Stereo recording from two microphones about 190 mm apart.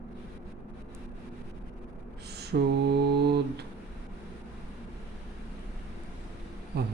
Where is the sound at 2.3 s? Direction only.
60° right (ahead or behind).